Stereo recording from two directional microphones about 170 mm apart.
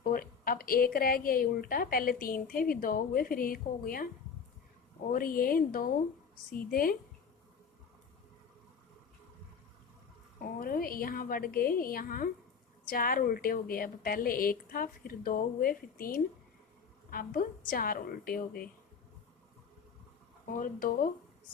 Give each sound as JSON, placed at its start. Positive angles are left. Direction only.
{"t": 0.0, "sound": "a woman's voice", "side_deg": 60}
{"t": 10.4, "sound": "a woman's voice", "side_deg": 55}
{"t": 20.5, "sound": "a woman's voice", "side_deg": 55}